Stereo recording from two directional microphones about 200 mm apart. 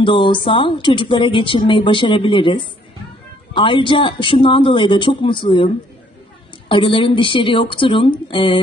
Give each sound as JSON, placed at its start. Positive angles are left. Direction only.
{"t": 0.0, "sound": "speech", "side_deg": 25}
{"t": 6.7, "sound": "speech", "side_deg": 25}